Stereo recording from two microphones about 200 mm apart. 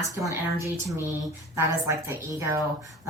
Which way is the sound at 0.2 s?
15° right (ahead or behind).